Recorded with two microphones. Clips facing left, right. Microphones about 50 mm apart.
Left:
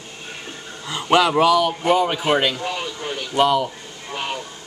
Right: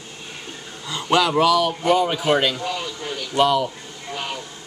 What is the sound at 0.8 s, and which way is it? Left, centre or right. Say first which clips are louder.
A man's voice: left 2 dB; centre.